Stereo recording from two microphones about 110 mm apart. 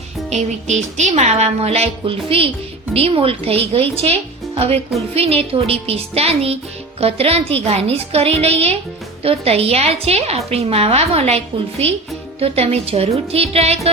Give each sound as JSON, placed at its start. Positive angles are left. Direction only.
{"t": 0.3, "sound": "music", "side_deg": -85}
{"t": 2.0, "sound": "a woman's voice", "side_deg": -55}
{"t": 4.5, "sound": "music", "side_deg": -65}
{"t": 5.1, "sound": "a woman's voice", "side_deg": -60}